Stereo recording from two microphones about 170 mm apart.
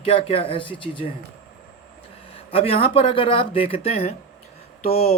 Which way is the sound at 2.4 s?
35° left (ahead or behind).